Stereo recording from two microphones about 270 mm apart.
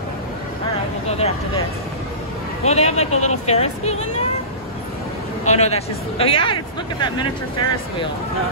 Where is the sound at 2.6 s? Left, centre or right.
Left.